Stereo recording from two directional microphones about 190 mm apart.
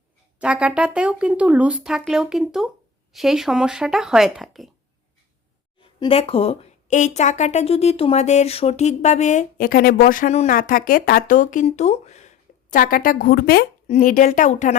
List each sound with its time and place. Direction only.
0.3 s speech: 5° right (ahead or behind)
6.0 s a woman's voice: 30° left (ahead or behind); by 13.7 s 55° left (ahead or behind)
13.8 s a woman's voice: 40° left (ahead or behind)